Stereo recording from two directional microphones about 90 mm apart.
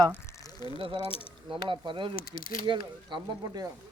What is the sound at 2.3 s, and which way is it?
Speech, 55° right (ahead or behind).